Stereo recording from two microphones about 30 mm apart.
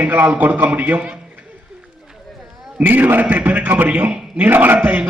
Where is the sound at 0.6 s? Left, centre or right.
Right.